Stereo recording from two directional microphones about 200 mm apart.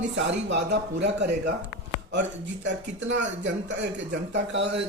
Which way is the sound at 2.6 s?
65° right (ahead or behind).